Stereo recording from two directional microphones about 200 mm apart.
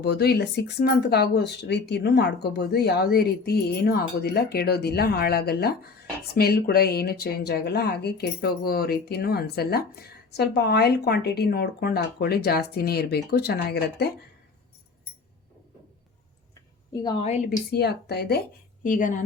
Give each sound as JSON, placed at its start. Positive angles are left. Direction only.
{"t": 0.0, "sound": "speech", "side_deg": 55}
{"t": 16.9, "sound": "a woman's voice", "side_deg": 20}
{"t": 17.7, "sound": "speech", "side_deg": 55}
{"t": 18.8, "sound": "speech", "side_deg": 40}